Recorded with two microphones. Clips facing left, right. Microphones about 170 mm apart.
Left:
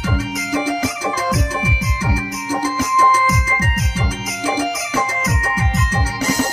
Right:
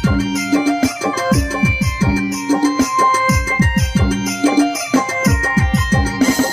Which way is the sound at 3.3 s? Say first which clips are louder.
Right 4 dB; 90° right.